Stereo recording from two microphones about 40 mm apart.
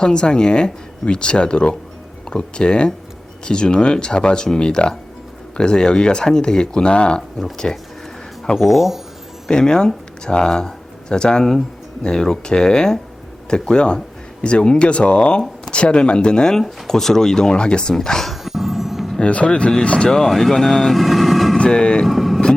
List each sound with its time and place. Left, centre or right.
0.0 s speech: left
8.5 s speech: centre
9.5 s speech: centre
18.3 s music: centre
19.2 s speech: left
20.1 s speech: centre
21.6 s vehicle: left
22.0 s speech: centre